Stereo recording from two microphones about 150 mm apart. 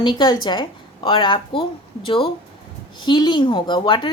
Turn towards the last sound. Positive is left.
turn(degrees=30)  # may be behind; listen again after turning